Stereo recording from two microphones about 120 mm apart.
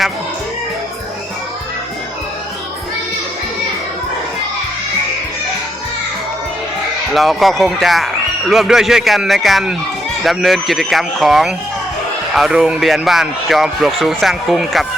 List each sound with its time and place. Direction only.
7.1 s a man's voice: centre (ahead or behind)